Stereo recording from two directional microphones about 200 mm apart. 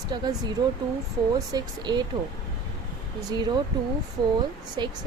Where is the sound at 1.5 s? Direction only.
20° right (ahead or behind).